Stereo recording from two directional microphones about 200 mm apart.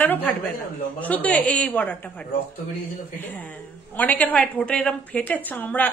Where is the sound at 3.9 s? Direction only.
10° left (ahead or behind).